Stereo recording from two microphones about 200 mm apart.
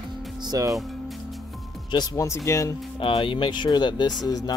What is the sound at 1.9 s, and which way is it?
Speech, 20° left (ahead or behind).